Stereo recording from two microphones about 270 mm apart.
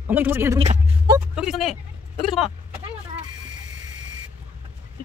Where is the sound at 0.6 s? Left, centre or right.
Right.